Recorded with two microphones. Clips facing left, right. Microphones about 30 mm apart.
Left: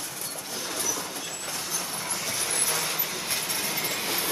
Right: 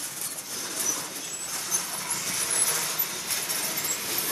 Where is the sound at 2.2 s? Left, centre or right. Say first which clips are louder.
Left 1 dB; centre; by 4.3 s left.